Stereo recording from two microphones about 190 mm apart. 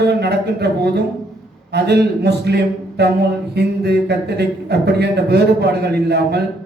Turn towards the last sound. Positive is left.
turn(degrees=-60)  # may be behind; listen again after turning